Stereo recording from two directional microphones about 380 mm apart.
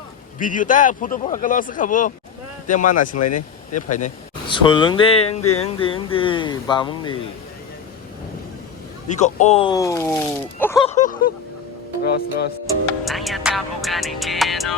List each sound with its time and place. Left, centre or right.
0.3 s speech: left
3.2 s speech: left
3.8 s speech: centre
5.3 s a sound: left
5.6 s speech: centre
9.0 s speech: centre
13.1 s music: centre